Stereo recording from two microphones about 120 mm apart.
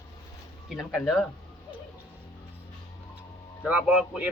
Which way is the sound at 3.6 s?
10° right (ahead or behind).